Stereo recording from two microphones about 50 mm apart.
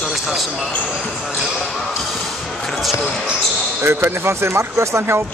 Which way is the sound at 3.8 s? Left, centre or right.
Right.